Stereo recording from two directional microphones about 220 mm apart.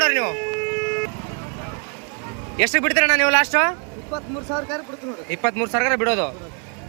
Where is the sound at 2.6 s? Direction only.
5° left (ahead or behind).